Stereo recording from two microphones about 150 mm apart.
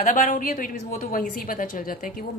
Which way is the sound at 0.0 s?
60° left (ahead or behind).